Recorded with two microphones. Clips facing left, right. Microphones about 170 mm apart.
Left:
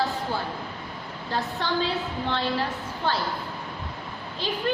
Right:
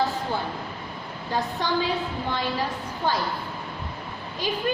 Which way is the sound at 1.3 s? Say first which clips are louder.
Right 2 dB; 15° right (ahead or behind).